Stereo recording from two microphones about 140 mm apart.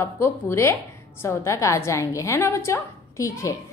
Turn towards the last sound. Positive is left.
turn(degrees=20)  # may be behind; listen again after turning